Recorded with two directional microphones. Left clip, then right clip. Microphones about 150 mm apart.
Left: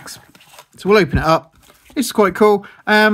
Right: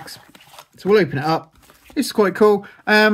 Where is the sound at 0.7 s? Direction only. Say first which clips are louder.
Left 2 dB; 45° left (ahead or behind).